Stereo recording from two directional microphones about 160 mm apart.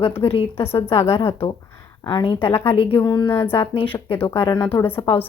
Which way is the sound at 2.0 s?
30° left (ahead or behind).